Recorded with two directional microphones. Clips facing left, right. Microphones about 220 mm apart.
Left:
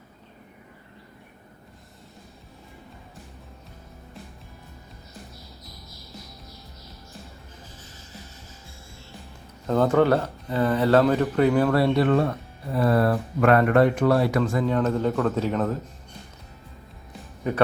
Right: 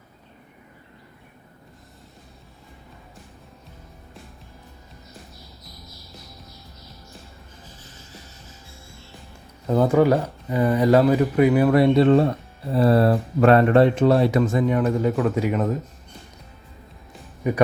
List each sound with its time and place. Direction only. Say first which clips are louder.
9.6 s speech: right 2 dB; 10° right (ahead or behind)
17.4 s speech: right 3 dB; 10° right (ahead or behind)